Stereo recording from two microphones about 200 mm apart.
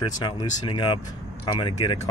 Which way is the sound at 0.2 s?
25° left (ahead or behind).